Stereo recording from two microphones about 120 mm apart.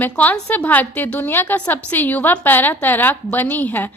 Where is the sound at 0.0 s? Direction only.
15° left (ahead or behind).